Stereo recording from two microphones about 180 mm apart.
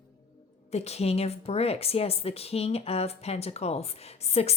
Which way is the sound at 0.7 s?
35° left (ahead or behind).